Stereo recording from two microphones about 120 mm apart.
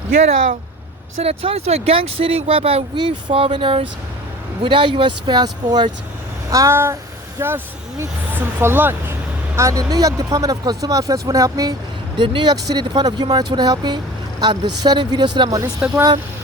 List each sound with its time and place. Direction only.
1.2 s speech: 55° right (ahead or behind)
2.9 s speech: 40° right (ahead or behind)
6.5 s speech: 25° right (ahead or behind)